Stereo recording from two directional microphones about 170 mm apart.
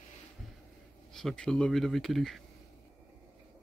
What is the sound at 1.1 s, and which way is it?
Speech, 5° left (ahead or behind).